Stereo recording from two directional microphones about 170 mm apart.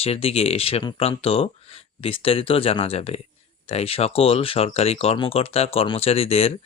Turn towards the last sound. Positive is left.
turn(degrees=35)  # may be behind; listen again after turning